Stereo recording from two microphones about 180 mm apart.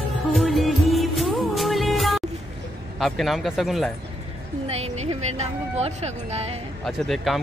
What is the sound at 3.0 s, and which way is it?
Speech, centre (ahead or behind).